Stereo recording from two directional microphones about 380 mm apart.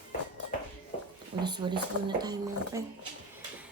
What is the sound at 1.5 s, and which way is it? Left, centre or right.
Speech, centre.